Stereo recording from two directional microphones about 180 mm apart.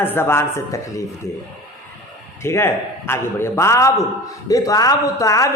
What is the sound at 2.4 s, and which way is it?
A man's voice, 15° left (ahead or behind).